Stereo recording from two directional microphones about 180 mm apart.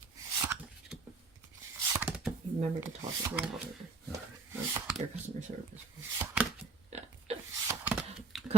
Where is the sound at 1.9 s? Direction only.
10° right (ahead or behind).